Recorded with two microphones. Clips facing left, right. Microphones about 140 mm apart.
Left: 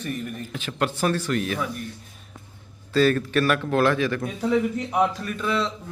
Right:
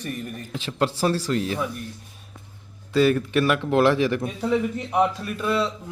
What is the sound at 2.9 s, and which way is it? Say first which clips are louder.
A man's voice: right 1 dB; 15° right (ahead or behind).